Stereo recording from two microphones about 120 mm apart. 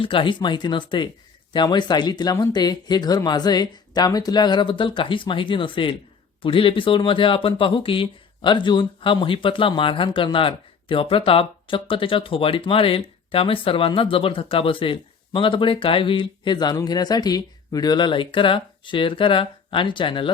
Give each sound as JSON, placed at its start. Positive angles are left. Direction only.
{"t": 0.0, "sound": "speech", "side_deg": 45}